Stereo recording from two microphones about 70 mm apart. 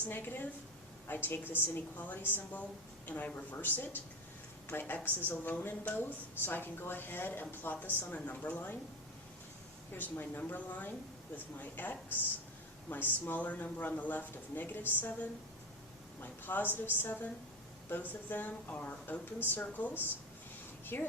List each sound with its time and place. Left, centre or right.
0.1 s a woman's voice: left
9.9 s a woman's voice: left
20.9 s a woman's voice: left